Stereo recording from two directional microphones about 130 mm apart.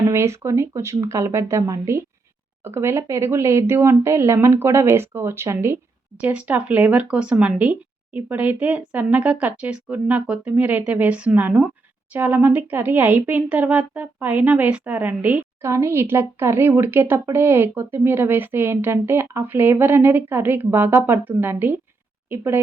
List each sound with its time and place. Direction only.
0.1 s speech: 20° right (ahead or behind)